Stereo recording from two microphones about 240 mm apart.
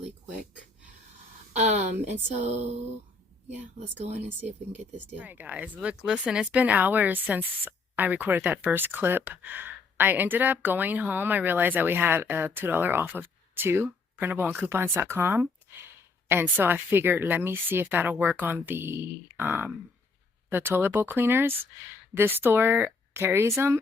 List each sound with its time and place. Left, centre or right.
1.5 s speech: right
3.8 s speech: right
4.4 s speech: centre